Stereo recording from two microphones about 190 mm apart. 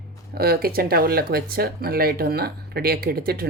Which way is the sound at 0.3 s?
55° right (ahead or behind).